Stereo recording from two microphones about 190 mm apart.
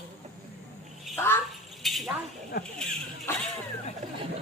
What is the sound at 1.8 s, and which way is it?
Chink, centre (ahead or behind).